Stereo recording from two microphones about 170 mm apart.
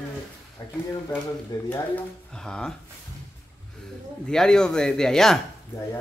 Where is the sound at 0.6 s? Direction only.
20° left (ahead or behind).